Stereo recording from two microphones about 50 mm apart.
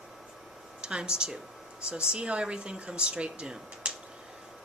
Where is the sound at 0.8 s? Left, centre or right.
Centre.